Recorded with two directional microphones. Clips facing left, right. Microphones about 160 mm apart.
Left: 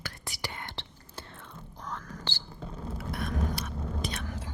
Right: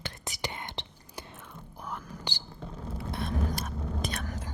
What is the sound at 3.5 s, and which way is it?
Chewing, 45° right (ahead or behind).